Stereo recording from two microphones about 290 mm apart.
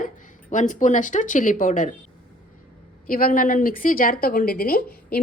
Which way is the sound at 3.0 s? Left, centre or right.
Left.